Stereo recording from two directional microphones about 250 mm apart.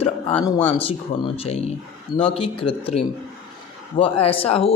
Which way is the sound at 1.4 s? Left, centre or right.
Left.